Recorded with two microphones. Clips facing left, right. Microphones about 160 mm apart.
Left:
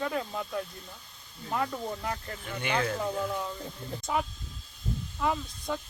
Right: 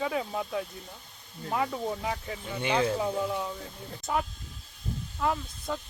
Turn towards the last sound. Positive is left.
turn(degrees=0)  # may be behind; listen again after turning